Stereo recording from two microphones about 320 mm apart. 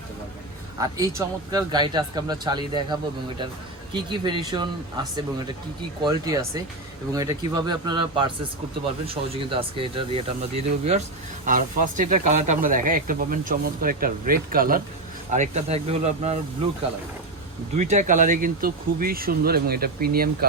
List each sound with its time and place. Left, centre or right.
0.8 s speech: centre
17.7 s speech: right